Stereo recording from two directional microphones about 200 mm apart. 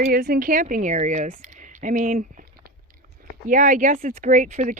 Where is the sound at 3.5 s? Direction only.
40° right (ahead or behind).